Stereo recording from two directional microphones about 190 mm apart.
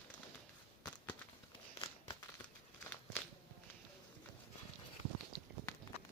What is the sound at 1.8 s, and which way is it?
Crumpling, 15° left (ahead or behind).